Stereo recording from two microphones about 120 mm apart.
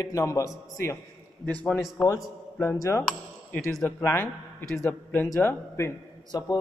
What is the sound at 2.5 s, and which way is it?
A man's voice, 20° left (ahead or behind).